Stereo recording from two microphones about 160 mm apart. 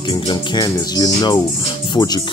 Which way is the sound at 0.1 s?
25° left (ahead or behind).